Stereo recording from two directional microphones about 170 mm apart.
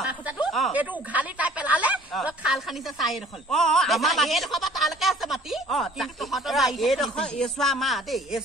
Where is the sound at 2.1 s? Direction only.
5° right (ahead or behind).